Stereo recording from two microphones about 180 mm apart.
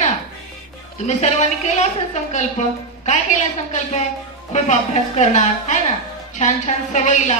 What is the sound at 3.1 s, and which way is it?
A woman's voice, 40° left (ahead or behind).